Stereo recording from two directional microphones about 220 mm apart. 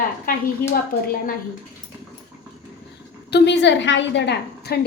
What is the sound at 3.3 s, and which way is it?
A woman's voice, 50° left (ahead or behind).